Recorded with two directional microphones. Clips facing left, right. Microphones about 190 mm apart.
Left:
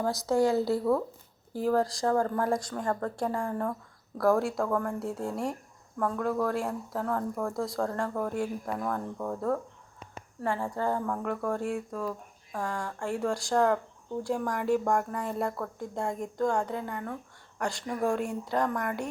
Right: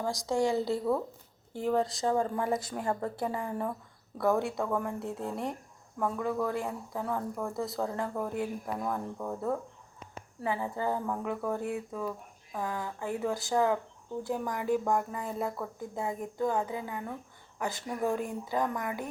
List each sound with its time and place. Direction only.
0.0 s speech: 15° right (ahead or behind)
1.7 s speech: centre (ahead or behind)
2.0 s speech: 15° right (ahead or behind)
2.4 s speech: 5° right (ahead or behind)